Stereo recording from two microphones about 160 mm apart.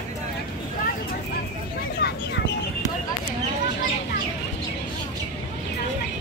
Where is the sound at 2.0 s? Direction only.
90° left.